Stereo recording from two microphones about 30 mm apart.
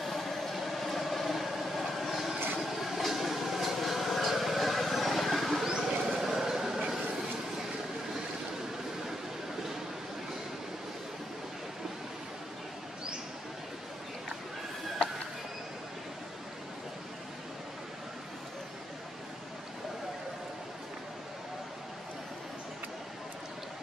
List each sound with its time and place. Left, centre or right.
0.0 s vehicle: centre
5.7 s vehicle: right
6.0 s a sound: centre